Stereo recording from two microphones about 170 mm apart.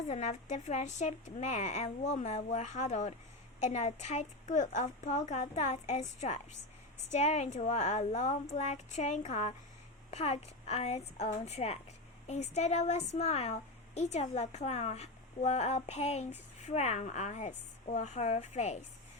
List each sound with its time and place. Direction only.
0.1 s a woman's voice: 40° left (ahead or behind)